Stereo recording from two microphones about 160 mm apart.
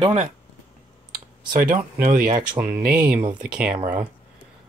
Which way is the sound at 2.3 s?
25° right (ahead or behind).